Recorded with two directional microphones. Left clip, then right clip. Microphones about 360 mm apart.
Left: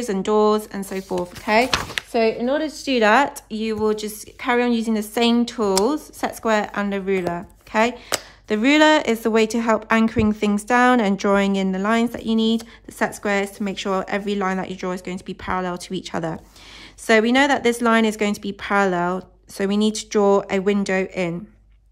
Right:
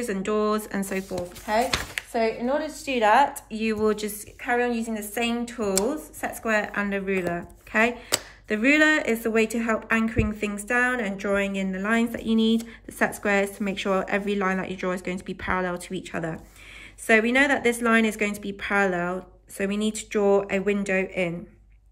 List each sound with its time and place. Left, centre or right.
0.0 s speech: centre
1.9 s speech: left
3.4 s a woman's voice: centre